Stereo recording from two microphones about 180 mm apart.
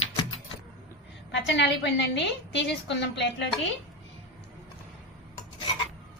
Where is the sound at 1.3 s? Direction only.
80° left.